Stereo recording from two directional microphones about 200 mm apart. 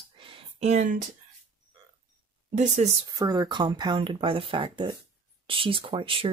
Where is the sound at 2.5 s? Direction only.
35° right (ahead or behind).